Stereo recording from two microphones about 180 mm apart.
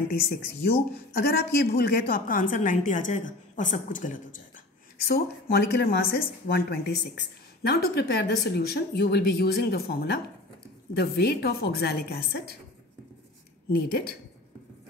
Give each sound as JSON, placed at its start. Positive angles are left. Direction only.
{"t": 0.9, "sound": "a woman's voice", "side_deg": 55}
{"t": 5.0, "sound": "speech", "side_deg": 60}
{"t": 13.7, "sound": "speech", "side_deg": 60}